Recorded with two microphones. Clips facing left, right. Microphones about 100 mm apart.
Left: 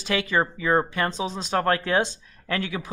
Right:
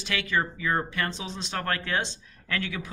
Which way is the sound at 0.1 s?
35° left (ahead or behind).